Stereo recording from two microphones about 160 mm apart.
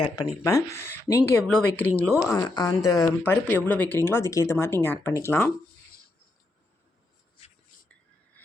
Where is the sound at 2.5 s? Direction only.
25° left (ahead or behind).